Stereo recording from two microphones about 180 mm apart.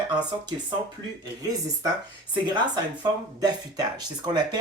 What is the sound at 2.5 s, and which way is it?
Speech, 25° right (ahead or behind).